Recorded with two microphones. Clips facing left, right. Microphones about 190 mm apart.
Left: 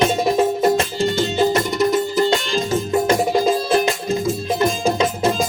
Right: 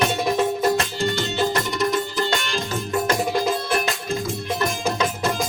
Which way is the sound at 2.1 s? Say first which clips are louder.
Left 6 dB; 20° left (ahead or behind).